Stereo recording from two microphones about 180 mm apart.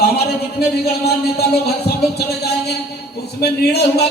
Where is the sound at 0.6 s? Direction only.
60° left (ahead or behind).